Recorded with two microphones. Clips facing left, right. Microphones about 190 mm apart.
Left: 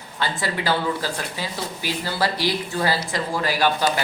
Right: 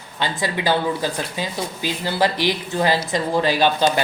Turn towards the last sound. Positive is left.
turn(degrees=-20)  # may be behind; listen again after turning